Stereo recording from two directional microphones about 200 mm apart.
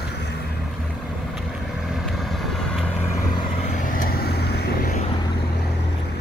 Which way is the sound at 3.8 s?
45° left (ahead or behind).